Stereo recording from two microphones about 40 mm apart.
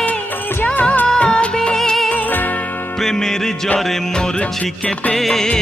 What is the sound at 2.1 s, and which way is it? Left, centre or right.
Music, left.